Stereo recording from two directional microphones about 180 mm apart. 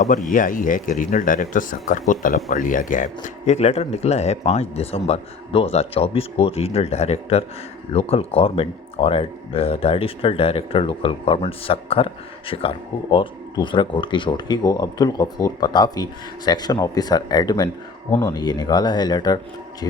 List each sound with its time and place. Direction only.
0.0 s speech: 45° left (ahead or behind); by 19.4 s 20° left (ahead or behind)